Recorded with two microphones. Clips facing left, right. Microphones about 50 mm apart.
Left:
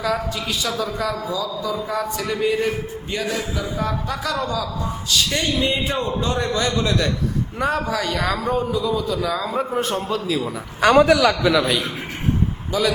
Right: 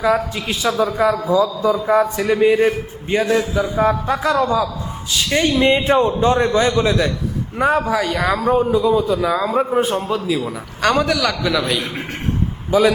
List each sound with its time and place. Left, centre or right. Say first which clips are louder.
0.0 s a man's voice: right 5 dB; right; by 10.5 s centre
10.8 s a man's voice: left 3 dB; centre
12.7 s a man's voice: right 7 dB; right